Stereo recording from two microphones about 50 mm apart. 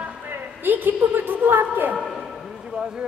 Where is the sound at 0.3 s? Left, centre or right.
Right.